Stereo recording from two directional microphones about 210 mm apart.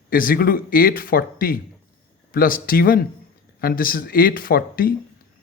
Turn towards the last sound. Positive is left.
turn(degrees=45)  # may be behind; listen again after turning